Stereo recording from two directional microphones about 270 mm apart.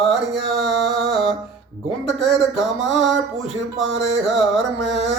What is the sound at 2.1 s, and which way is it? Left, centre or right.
Speech, centre.